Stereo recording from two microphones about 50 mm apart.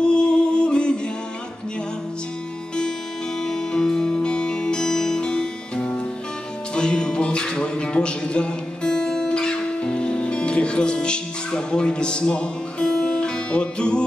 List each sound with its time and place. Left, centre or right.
0.0 s music: centre
3.4 s music: centre